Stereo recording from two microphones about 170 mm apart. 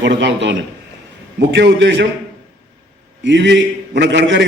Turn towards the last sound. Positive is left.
turn(degrees=-90)